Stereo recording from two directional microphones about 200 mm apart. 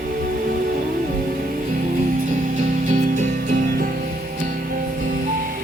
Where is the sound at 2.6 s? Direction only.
40° right (ahead or behind).